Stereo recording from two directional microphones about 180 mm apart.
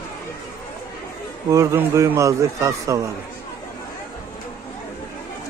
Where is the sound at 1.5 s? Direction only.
15° right (ahead or behind).